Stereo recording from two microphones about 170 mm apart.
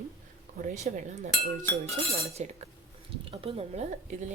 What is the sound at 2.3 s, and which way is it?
Speech, 40° right (ahead or behind).